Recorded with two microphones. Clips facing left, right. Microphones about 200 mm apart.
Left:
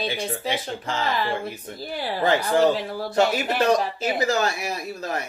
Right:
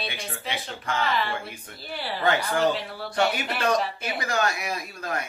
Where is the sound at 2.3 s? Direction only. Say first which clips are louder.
Left 4 dB; 35° left (ahead or behind).